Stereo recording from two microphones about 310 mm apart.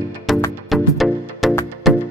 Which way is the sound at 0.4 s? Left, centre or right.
Centre.